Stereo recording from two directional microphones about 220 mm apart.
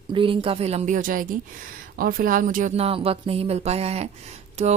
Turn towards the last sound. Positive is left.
turn(degrees=-30)  # may be behind; listen again after turning